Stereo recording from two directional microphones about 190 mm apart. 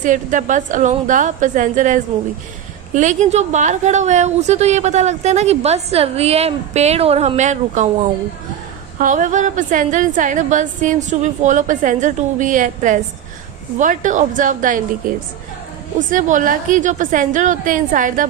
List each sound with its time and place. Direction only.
0.0 s a woman's voice: 40° right (ahead or behind)
9.0 s a woman's voice: 45° right (ahead or behind)
16.0 s a woman's voice: 45° right (ahead or behind)